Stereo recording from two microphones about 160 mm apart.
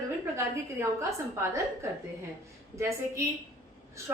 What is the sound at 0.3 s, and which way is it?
A woman's voice, 15° right (ahead or behind).